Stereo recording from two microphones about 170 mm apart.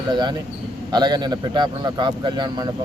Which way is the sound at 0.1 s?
25° right (ahead or behind).